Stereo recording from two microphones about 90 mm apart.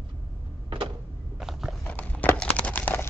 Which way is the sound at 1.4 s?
5° right (ahead or behind).